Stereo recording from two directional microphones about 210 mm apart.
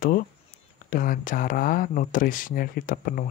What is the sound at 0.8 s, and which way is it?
Speech, 40° left (ahead or behind).